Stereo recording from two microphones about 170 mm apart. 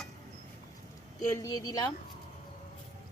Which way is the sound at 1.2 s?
20° left (ahead or behind).